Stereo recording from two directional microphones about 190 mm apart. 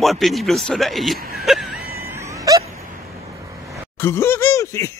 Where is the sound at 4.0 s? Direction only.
15° left (ahead or behind).